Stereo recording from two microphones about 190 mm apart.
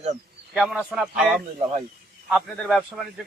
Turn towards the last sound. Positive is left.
turn(degrees=0)  # may be behind; listen again after turning